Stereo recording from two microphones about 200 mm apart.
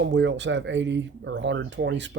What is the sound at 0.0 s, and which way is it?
Speech, 65° right (ahead or behind).